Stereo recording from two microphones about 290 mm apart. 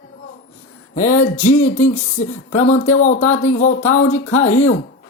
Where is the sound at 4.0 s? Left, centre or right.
Left.